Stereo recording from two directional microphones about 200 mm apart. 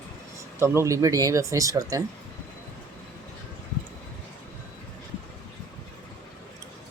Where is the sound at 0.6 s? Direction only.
15° right (ahead or behind).